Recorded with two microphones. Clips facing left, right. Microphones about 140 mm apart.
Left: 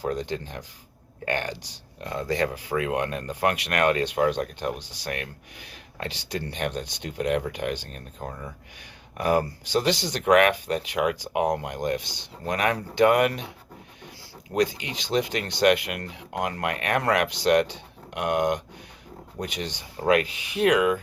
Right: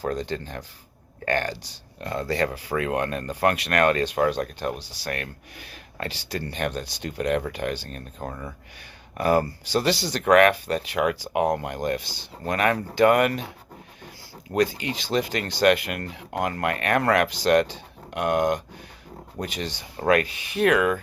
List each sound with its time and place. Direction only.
0.0 s speech: 10° left (ahead or behind)
9.1 s speech: 15° left (ahead or behind)
14.5 s speech: 15° left (ahead or behind)